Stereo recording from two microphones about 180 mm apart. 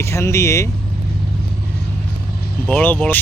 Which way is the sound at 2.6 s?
10° left (ahead or behind).